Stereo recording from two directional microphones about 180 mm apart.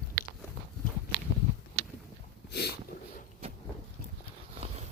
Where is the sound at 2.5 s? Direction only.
60° left (ahead or behind).